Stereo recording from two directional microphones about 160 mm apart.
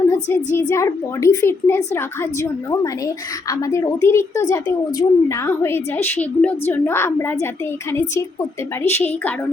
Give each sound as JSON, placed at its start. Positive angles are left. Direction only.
{"t": 0.1, "sound": "a woman's voice", "side_deg": 15}
{"t": 8.8, "sound": "a woman's voice", "side_deg": 15}